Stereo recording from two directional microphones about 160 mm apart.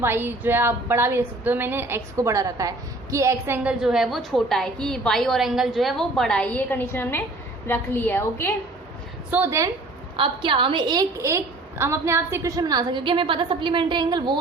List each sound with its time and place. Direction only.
0.0 s a woman's voice: 15° right (ahead or behind); by 8.5 s 15° left (ahead or behind)
9.3 s a woman's voice: 15° right (ahead or behind)
10.2 s a woman's voice: 30° right (ahead or behind)